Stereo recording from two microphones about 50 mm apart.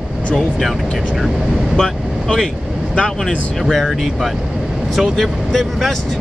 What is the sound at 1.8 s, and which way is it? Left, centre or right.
Speech, centre.